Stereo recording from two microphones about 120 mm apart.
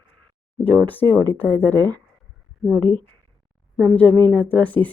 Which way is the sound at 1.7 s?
30° right (ahead or behind).